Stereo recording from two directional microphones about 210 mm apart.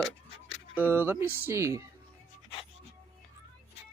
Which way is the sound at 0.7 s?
10° right (ahead or behind).